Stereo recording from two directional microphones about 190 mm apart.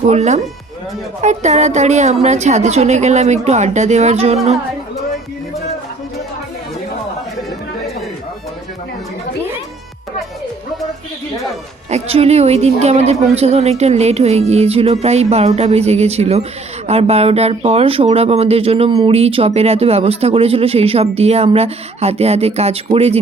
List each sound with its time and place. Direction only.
0.1 s a woman's voice: 35° right (ahead or behind)
11.9 s a woman's voice: 35° right (ahead or behind)